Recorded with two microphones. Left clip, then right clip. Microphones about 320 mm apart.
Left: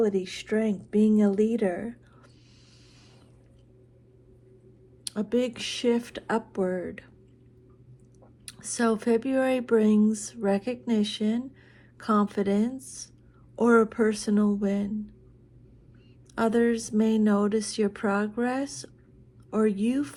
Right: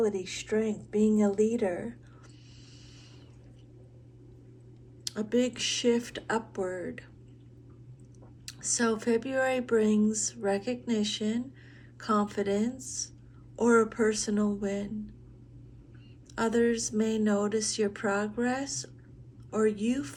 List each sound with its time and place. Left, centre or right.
0.0 s speech: left
5.0 s speech: centre
8.4 s speech: centre
16.3 s speech: centre